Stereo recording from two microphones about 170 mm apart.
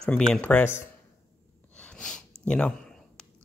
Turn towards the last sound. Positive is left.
turn(degrees=5)  # may be behind; listen again after turning